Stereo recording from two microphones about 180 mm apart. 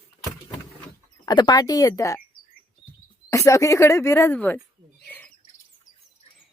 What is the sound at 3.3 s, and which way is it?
Speech, 15° left (ahead or behind).